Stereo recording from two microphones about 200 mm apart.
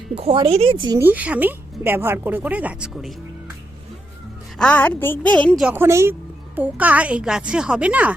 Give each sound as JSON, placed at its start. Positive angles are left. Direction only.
{"t": 0.2, "sound": "speech", "side_deg": -30}
{"t": 0.9, "sound": "a woman's voice", "side_deg": -10}
{"t": 4.5, "sound": "a woman's voice", "side_deg": 5}
{"t": 5.6, "sound": "a woman's voice", "side_deg": -10}